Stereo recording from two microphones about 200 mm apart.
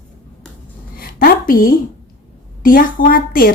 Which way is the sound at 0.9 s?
45° left (ahead or behind).